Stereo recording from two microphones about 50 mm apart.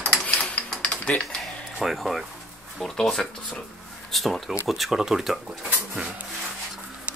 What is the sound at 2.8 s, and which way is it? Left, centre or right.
Speech, centre.